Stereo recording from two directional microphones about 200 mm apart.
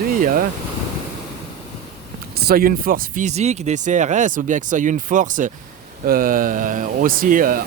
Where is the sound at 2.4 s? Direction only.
50° right (ahead or behind).